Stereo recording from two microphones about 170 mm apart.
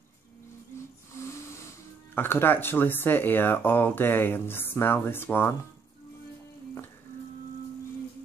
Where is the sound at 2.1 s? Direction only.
10° left (ahead or behind).